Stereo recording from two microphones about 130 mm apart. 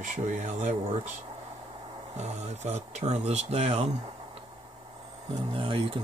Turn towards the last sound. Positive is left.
turn(degrees=-40)  # may be behind; listen again after turning